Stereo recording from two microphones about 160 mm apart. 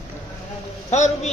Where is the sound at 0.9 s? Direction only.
45° left (ahead or behind).